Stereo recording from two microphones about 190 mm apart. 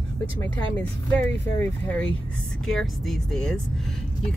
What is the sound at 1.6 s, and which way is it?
Speech, 5° left (ahead or behind).